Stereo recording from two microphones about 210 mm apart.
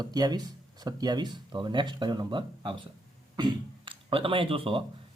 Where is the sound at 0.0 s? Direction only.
20° right (ahead or behind).